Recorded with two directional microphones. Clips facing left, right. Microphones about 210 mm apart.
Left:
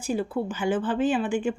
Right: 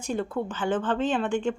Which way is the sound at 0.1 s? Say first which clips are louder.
Left 2 dB; 10° left (ahead or behind).